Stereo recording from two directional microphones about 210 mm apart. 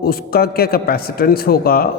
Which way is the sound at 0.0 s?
45° left (ahead or behind).